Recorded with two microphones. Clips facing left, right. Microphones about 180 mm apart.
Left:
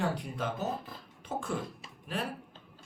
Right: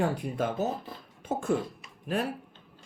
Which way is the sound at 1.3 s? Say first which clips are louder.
Right 5 dB; 45° right (ahead or behind).